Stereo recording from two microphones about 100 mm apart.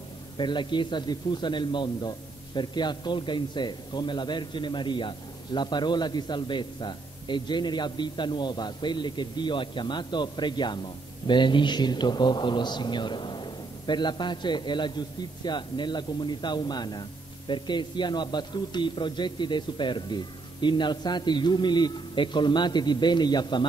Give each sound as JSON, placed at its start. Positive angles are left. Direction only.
{"t": 0.4, "sound": "a man's voice", "side_deg": 50}